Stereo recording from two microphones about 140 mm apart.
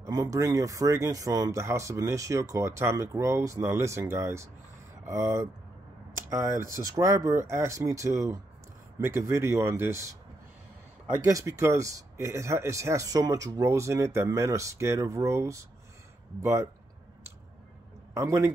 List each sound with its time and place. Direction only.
0.0 s speech: 20° right (ahead or behind)
11.2 s speech: 20° right (ahead or behind)
18.1 s a man's voice: 20° right (ahead or behind)